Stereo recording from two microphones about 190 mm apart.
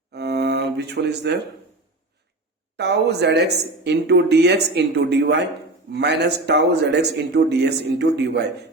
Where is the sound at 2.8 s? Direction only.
60° right (ahead or behind).